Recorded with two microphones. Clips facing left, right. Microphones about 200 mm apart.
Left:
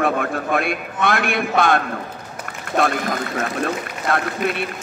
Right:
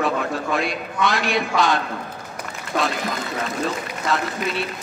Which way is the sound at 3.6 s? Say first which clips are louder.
Left 1 dB; 55° left (ahead or behind).